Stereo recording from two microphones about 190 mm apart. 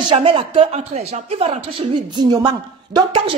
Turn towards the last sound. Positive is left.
turn(degrees=-25)  # may be behind; listen again after turning